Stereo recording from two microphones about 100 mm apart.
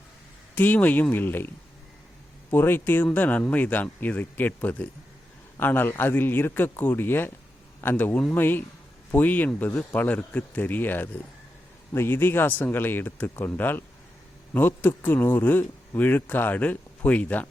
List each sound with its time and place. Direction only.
0.5 s speech: 20° left (ahead or behind)
2.5 s a man's voice: 20° left (ahead or behind)